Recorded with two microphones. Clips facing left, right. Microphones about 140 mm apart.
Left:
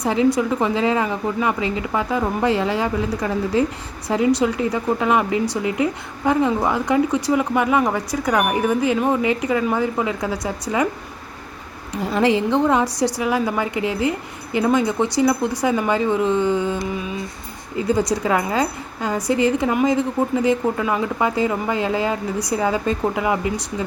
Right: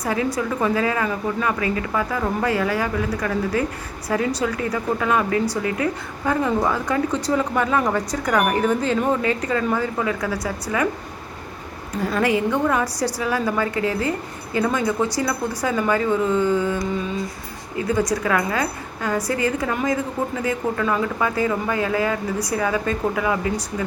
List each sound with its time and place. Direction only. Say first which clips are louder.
0.0 s a woman's voice: left 5 dB; 20° left (ahead or behind)
12.0 s a woman's voice: left 2 dB; 25° left (ahead or behind)